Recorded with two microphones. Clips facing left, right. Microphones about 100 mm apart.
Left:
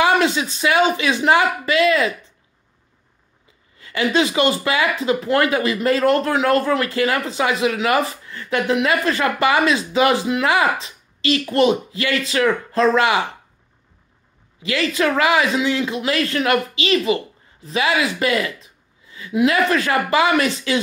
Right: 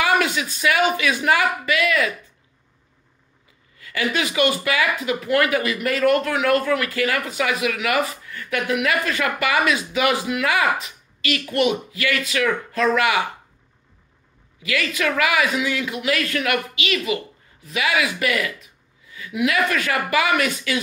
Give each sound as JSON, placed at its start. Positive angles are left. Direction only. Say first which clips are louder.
{"t": 0.0, "sound": "speech", "louder": "left 3 dB", "side_deg": 25}
{"t": 3.7, "sound": "speech", "louder": "left 5 dB", "side_deg": 25}
{"t": 14.6, "sound": "speech", "louder": "left 4 dB", "side_deg": 30}